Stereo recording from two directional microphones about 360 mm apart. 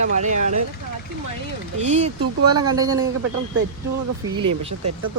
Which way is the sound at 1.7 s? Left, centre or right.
Centre.